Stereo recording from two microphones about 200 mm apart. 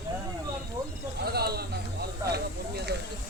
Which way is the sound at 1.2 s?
50° right (ahead or behind).